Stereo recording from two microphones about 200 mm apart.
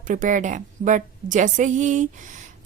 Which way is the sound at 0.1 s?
40° right (ahead or behind).